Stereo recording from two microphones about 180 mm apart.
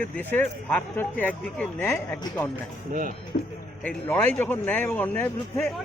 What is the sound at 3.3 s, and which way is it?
Speech, 45° left (ahead or behind).